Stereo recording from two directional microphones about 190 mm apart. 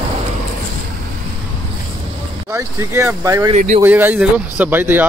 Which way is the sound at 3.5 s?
40° right (ahead or behind).